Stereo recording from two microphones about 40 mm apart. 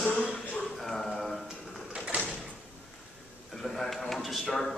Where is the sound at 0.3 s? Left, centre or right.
Left.